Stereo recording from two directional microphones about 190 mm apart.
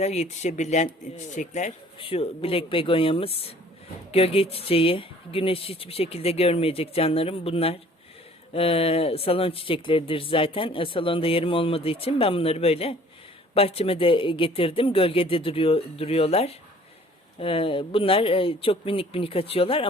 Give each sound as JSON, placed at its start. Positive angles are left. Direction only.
{"t": 0.0, "sound": "speech", "side_deg": 35}